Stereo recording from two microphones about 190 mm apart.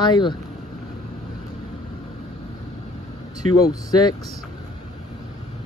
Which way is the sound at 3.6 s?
20° left (ahead or behind).